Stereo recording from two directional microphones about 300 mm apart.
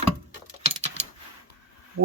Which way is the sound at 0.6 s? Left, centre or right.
Right.